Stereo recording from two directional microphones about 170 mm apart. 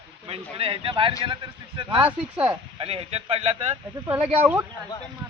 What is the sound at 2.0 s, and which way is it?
Speech, 10° right (ahead or behind).